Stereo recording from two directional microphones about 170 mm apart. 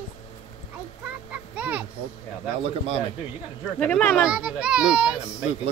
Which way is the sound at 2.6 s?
35° right (ahead or behind).